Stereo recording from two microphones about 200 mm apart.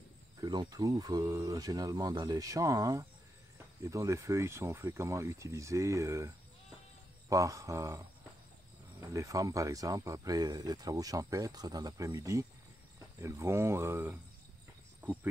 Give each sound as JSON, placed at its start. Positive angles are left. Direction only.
{"t": 0.4, "sound": "speech", "side_deg": -20}
{"t": 9.0, "sound": "speech", "side_deg": -15}